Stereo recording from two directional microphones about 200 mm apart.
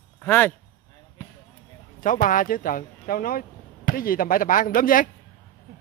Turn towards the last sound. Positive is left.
turn(degrees=45)  # may be behind; listen again after turning